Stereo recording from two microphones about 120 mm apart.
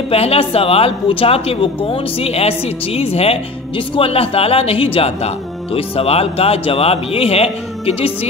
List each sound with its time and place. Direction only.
0.1 s a woman's voice: 55° left (ahead or behind)